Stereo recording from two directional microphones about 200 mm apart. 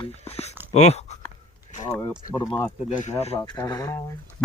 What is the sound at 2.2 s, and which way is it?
A man's voice, 45° left (ahead or behind).